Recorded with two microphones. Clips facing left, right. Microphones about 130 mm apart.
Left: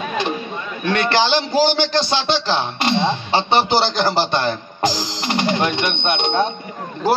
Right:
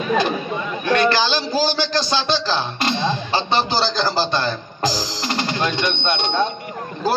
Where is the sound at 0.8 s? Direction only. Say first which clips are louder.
Even; 25° left (ahead or behind).